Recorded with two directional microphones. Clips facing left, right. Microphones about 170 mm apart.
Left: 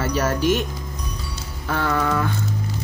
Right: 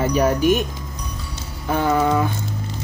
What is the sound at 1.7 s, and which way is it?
Speech, 20° right (ahead or behind).